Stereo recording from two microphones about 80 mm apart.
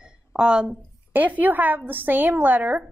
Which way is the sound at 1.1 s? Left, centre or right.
Right.